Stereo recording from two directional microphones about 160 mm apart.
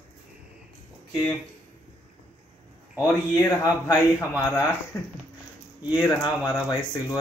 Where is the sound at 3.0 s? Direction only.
15° left (ahead or behind).